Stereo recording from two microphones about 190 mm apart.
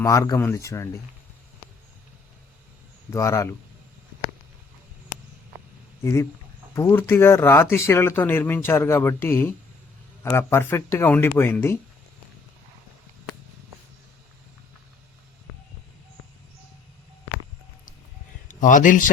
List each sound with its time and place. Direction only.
0.0 s speech: 20° left (ahead or behind)
3.1 s speech: 15° left (ahead or behind)
6.7 s speech: 15° left (ahead or behind)
18.4 s speech: 40° left (ahead or behind)